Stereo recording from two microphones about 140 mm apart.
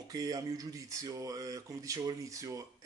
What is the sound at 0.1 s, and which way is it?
Speech, 25° right (ahead or behind).